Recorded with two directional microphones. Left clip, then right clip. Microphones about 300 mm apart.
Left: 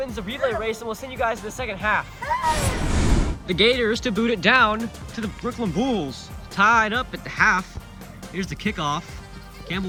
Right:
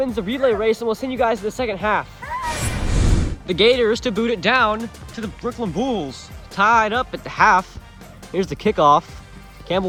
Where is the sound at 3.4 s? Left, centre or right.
Centre.